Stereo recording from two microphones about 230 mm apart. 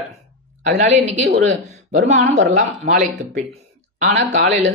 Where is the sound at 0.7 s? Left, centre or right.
Right.